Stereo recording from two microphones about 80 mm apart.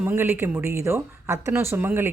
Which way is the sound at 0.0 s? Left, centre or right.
Right.